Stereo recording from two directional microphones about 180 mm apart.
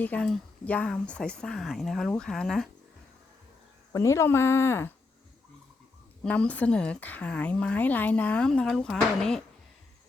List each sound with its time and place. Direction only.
0.0 s speech: 5° left (ahead or behind)
3.9 s a woman's voice: 15° left (ahead or behind)
6.2 s a woman's voice: 5° left (ahead or behind)